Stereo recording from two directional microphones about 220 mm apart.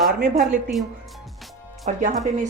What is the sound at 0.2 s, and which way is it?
Speech, 40° right (ahead or behind).